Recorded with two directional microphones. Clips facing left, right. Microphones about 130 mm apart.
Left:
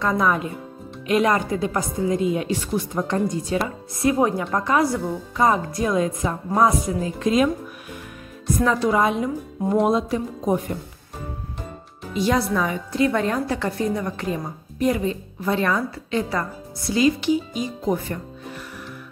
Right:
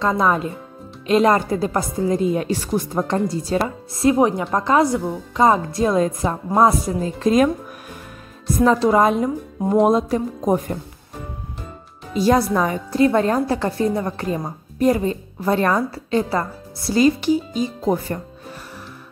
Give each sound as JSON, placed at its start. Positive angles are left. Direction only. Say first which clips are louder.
{"t": 0.0, "sound": "a woman's voice", "louder": "right 2 dB", "side_deg": -30}
{"t": 8.5, "sound": "a woman's voice", "louder": "right 5 dB", "side_deg": -30}
{"t": 12.1, "sound": "a woman's voice", "louder": "right 4 dB", "side_deg": -40}